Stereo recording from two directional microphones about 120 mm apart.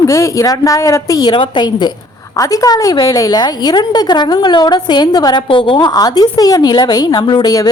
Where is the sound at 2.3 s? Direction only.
30° left (ahead or behind).